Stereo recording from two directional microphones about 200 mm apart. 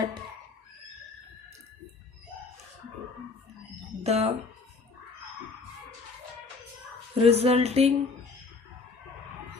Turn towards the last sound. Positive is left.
turn(degrees=-30)  # may be behind; listen again after turning